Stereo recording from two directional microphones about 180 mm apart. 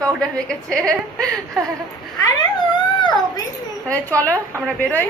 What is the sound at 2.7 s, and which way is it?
Dog, 25° left (ahead or behind).